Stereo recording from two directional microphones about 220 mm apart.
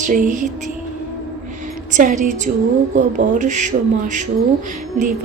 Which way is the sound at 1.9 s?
35° right (ahead or behind).